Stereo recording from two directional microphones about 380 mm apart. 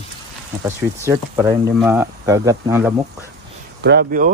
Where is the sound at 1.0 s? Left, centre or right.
Centre.